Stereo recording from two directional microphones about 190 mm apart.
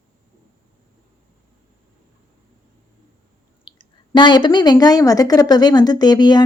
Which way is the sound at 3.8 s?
25° left (ahead or behind).